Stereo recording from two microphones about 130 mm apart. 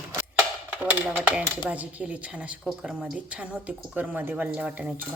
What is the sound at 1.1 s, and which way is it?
Speech, 15° right (ahead or behind).